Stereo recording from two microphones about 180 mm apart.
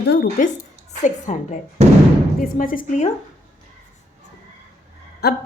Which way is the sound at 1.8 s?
35° right (ahead or behind).